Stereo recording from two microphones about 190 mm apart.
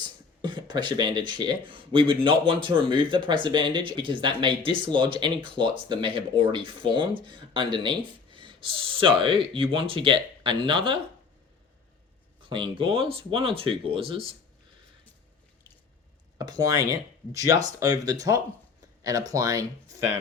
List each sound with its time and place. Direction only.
0.0 s speech: 25° right (ahead or behind)
12.4 s speech: 25° right (ahead or behind)
16.4 s speech: 20° right (ahead or behind)